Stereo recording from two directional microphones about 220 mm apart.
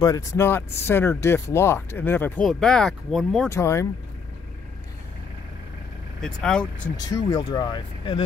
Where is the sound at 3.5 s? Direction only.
15° left (ahead or behind).